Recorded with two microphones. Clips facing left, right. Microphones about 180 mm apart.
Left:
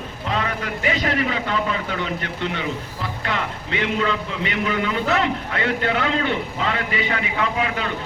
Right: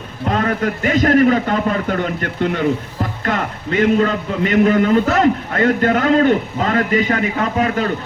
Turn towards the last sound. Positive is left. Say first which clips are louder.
# right 6 dB
turn(degrees=-45)  # may be behind; listen again after turning